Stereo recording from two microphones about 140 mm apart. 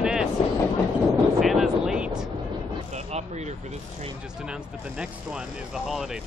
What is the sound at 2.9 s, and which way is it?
Vehicle, 50° right (ahead or behind).